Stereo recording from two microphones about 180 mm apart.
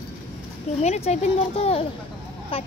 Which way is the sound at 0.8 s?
40° left (ahead or behind).